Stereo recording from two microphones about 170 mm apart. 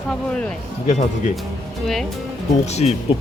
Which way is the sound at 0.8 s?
45° left (ahead or behind).